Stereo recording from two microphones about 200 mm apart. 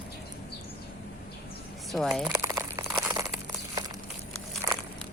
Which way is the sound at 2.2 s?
15° right (ahead or behind).